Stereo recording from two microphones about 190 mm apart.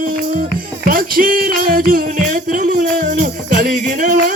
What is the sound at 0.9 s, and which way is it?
Music, 50° right (ahead or behind).